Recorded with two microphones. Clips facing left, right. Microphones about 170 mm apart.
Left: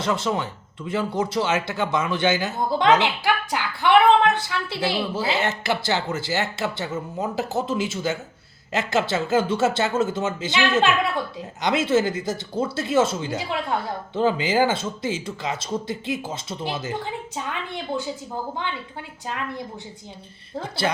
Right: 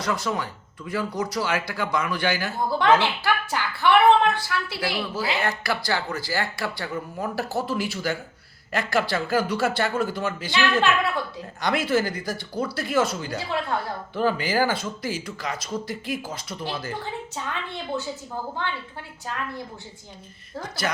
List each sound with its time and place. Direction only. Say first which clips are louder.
0.0 s a man's voice: left 3 dB; 25° left (ahead or behind)
20.6 s a man's voice: left 4 dB; 30° left (ahead or behind)